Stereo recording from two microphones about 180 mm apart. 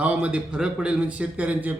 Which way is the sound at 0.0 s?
5° right (ahead or behind).